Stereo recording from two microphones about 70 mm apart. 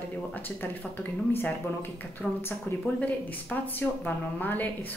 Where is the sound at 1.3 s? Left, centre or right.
Left.